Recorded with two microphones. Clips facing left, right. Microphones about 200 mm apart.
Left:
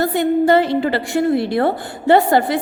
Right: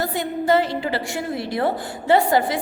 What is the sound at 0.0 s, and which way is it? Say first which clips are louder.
A woman's voice: left 8 dB; 60° left (ahead or behind).